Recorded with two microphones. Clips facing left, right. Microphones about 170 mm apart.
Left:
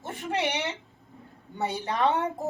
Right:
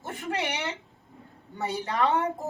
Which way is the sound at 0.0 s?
20° left (ahead or behind).